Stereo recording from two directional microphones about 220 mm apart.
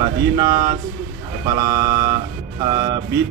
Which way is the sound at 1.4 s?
20° right (ahead or behind).